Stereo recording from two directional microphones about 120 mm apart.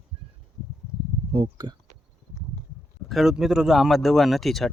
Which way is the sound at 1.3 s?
45° right (ahead or behind).